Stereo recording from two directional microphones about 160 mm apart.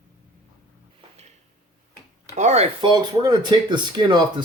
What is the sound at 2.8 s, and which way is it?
Speech, 25° right (ahead or behind).